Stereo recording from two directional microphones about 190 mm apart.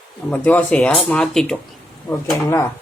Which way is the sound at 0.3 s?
5° left (ahead or behind).